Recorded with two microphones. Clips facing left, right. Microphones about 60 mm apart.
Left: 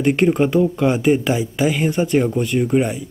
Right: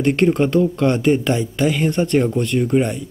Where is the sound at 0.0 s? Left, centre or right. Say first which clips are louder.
Even; centre.